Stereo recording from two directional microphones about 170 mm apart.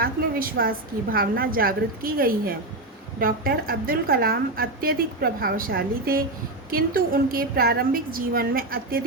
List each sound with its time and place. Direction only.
0.0 s a woman's voice: 60° right (ahead or behind)